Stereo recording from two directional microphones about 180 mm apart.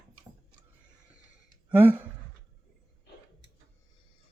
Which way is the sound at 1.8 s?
10° right (ahead or behind).